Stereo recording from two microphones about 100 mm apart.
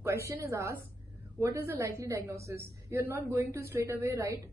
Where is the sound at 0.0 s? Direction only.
30° right (ahead or behind).